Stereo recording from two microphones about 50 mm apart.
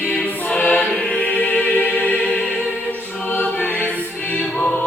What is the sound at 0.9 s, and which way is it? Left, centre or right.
Music, left.